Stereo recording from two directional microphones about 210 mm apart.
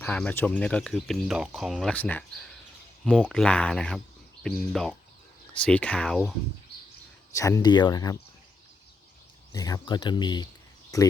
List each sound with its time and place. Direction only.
0.0 s speech: 10° left (ahead or behind)
7.3 s speech: 15° left (ahead or behind)
9.5 s speech: 15° left (ahead or behind)